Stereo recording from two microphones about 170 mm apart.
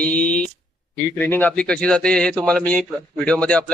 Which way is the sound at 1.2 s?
10° left (ahead or behind).